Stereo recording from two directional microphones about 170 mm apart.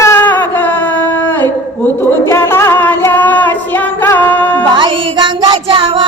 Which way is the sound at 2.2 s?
15° left (ahead or behind).